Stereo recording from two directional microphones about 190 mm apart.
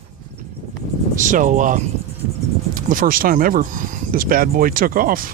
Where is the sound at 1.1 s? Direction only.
45° right (ahead or behind).